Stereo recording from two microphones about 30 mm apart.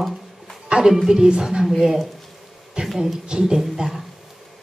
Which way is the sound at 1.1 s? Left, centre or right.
Right.